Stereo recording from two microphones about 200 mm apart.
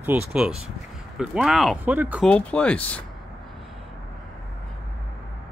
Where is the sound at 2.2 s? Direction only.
5° left (ahead or behind).